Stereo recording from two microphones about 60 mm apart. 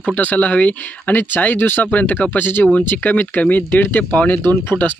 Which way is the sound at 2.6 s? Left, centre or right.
Left.